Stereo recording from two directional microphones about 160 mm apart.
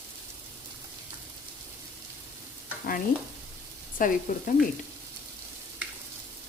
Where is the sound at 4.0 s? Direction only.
60° left (ahead or behind).